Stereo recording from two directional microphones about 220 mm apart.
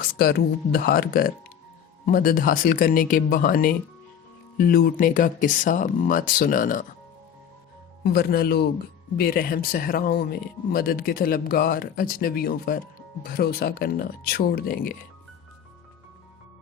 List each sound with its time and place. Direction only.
0.0 s speech: 45° left (ahead or behind)
8.0 s speech: 45° left (ahead or behind)